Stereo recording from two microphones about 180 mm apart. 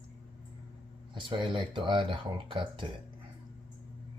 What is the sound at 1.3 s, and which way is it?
Speech, 25° right (ahead or behind).